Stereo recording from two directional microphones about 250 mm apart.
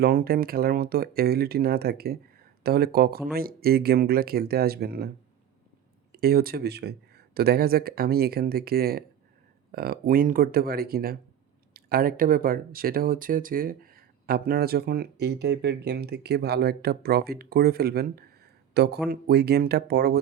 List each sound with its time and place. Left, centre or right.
0.0 s speech: right